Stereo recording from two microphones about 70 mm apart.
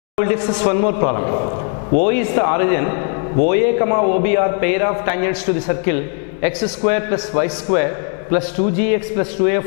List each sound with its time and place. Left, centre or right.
0.2 s a man's voice: centre